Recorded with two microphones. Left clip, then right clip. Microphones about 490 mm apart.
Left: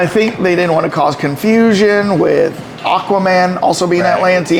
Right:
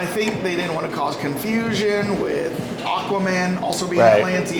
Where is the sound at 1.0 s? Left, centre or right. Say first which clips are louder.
Left 9 dB; left.